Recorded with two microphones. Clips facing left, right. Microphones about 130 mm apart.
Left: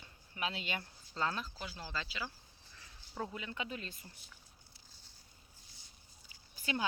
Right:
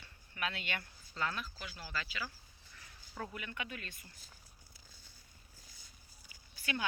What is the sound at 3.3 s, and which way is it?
Speech, 20° left (ahead or behind).